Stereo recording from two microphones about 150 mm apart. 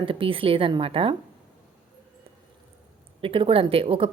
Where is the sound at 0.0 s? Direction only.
35° right (ahead or behind).